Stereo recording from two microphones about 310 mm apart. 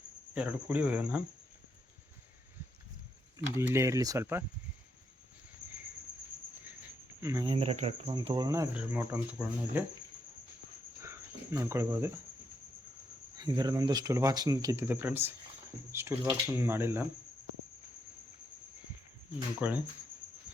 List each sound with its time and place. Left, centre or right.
0.3 s speech: centre
3.3 s speech: centre
6.7 s speech: centre
11.0 s cricket: centre
13.3 s speech: centre
19.5 s speech: centre